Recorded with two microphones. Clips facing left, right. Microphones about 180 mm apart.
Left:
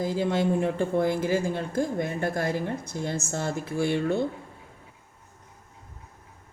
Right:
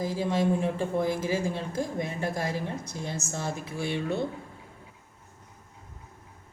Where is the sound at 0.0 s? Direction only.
65° left (ahead or behind).